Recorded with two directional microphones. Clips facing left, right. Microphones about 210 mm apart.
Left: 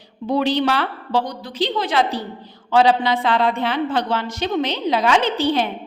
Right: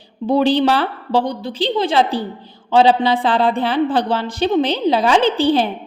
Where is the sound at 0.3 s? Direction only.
30° right (ahead or behind).